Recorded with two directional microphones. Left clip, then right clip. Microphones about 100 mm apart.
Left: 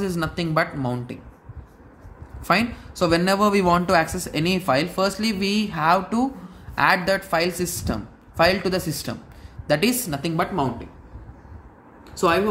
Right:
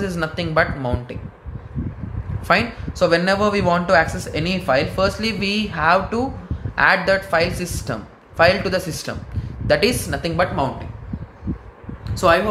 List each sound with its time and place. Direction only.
0.0 s speech: 45° left (ahead or behind)
2.4 s speech: 45° left (ahead or behind)
12.1 s a sound: 20° left (ahead or behind)